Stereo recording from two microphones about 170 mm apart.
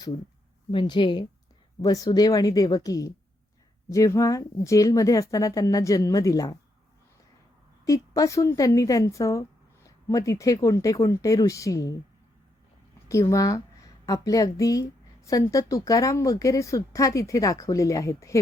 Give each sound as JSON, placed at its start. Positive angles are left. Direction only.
{"t": 0.7, "sound": "a woman's voice", "side_deg": 30}
{"t": 7.9, "sound": "a woman's voice", "side_deg": 20}
{"t": 13.1, "sound": "a woman's voice", "side_deg": 20}